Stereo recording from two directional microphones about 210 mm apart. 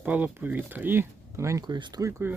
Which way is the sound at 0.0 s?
5° right (ahead or behind).